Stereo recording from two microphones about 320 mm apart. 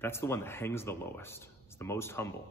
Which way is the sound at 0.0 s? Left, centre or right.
Centre.